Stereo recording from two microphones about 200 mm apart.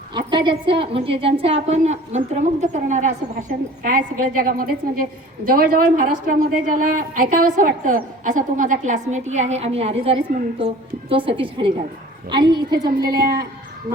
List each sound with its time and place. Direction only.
0.1 s a woman's voice: 20° right (ahead or behind)